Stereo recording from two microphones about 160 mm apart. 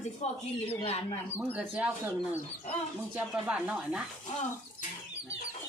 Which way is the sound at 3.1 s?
10° right (ahead or behind).